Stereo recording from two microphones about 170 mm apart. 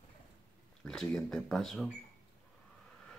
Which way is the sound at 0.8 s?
5° left (ahead or behind).